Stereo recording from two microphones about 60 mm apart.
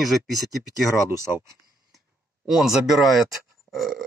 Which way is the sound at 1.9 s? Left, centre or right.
Centre.